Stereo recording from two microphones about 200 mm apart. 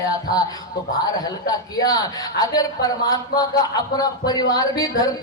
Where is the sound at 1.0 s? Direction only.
20° left (ahead or behind).